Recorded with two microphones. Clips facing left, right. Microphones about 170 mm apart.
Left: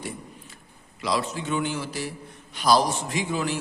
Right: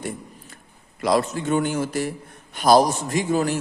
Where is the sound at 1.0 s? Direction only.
50° right (ahead or behind).